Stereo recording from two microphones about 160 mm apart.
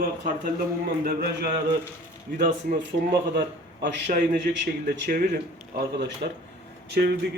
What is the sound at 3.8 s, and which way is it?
A man's voice, 65° right (ahead or behind).